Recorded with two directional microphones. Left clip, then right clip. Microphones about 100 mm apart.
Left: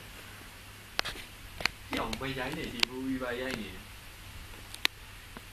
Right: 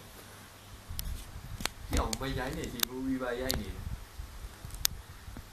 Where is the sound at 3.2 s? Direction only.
25° right (ahead or behind).